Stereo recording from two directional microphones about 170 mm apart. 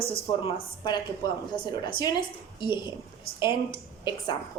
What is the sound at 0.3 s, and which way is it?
A woman's voice, 30° left (ahead or behind).